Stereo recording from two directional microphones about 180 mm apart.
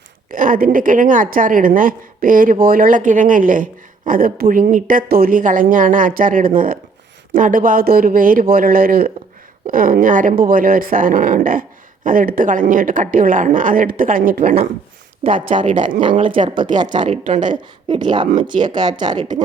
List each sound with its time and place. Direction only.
0.3 s a woman's voice: 50° right (ahead or behind)
15.2 s speech: 30° right (ahead or behind)
17.1 s a woman's voice: 45° right (ahead or behind)
17.4 s speech: 25° right (ahead or behind)
19.1 s speech: 40° right (ahead or behind)